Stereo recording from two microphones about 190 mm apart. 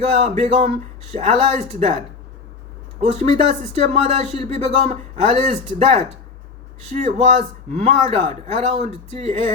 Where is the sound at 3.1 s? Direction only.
35° right (ahead or behind).